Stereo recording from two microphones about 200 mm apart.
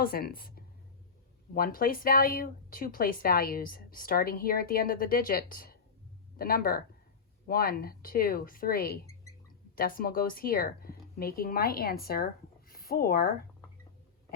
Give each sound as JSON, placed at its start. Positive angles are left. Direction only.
{"t": 0.0, "sound": "a woman's voice", "side_deg": 50}